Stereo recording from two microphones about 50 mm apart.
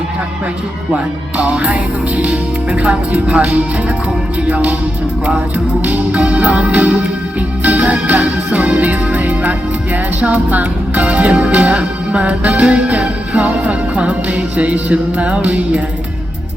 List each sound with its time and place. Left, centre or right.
0.9 s music: right
4.4 s speech: right
5.8 s music: right